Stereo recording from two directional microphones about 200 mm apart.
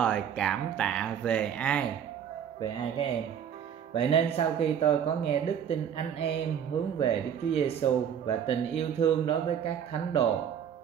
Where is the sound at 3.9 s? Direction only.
30° left (ahead or behind).